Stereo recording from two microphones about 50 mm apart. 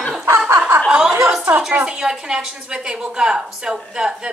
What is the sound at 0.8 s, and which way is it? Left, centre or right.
Chuckle, centre.